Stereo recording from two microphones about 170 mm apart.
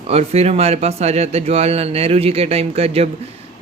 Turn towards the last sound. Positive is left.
turn(degrees=-35)  # may be behind; listen again after turning